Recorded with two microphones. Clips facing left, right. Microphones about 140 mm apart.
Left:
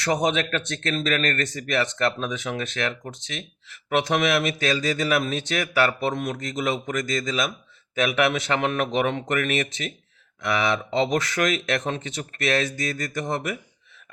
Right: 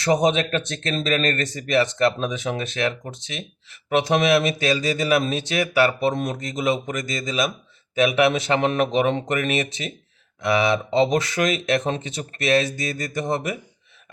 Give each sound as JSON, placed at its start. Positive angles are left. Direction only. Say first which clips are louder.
{"t": 0.0, "sound": "speech", "louder": "right 4 dB", "side_deg": -25}
{"t": 4.4, "sound": "speech", "louder": "right 2 dB", "side_deg": -15}
{"t": 11.9, "sound": "speech", "louder": "right 3 dB", "side_deg": -25}
{"t": 12.4, "sound": "speech", "louder": "right 4 dB", "side_deg": -15}